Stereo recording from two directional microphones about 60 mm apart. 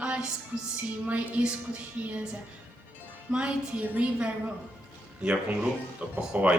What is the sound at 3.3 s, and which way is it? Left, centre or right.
Speech, centre.